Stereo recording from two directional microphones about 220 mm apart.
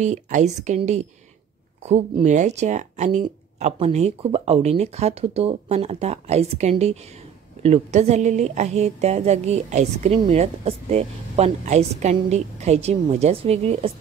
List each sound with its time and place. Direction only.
0.0 s a woman's voice: 35° right (ahead or behind)